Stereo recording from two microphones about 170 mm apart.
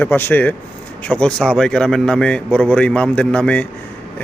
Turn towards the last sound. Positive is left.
turn(degrees=10)  # may be behind; listen again after turning